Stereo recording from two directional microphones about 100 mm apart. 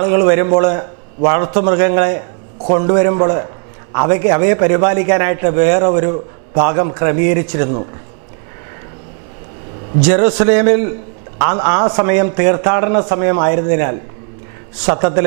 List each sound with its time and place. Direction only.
0.0 s a man's voice: 15° right (ahead or behind)
10.0 s a man's voice: 10° right (ahead or behind)